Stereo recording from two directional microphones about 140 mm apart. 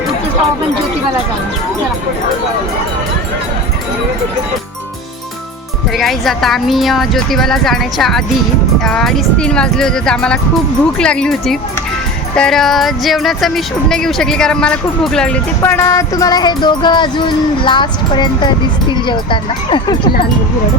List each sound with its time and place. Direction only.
6.0 s speech: centre (ahead or behind)
15.6 s music: 20° left (ahead or behind); by 20.0 s 35° left (ahead or behind)